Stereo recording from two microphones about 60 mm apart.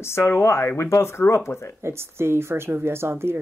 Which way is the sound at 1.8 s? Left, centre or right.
Right.